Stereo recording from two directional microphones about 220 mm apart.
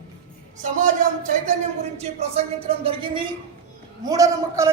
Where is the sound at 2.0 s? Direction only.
30° right (ahead or behind).